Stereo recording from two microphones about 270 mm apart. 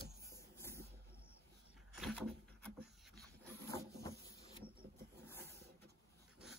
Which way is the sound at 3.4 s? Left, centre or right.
Centre.